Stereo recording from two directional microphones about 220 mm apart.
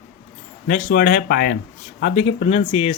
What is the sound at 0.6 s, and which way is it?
Speech, 35° left (ahead or behind).